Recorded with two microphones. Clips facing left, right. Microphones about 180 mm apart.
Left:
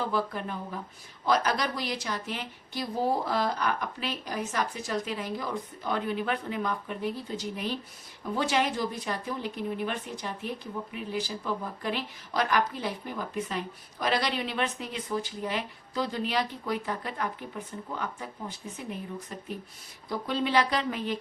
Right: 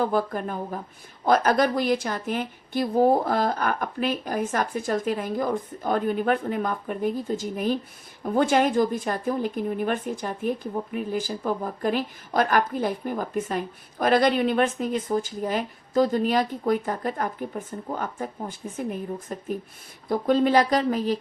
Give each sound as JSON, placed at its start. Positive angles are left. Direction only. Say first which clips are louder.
{"t": 0.0, "sound": "speech", "louder": "right 6 dB", "side_deg": -50}